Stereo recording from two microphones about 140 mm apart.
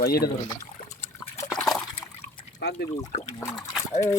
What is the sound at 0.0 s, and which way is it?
Speech, 90° left.